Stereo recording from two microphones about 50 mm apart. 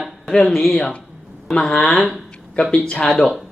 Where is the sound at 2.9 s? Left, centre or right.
Centre.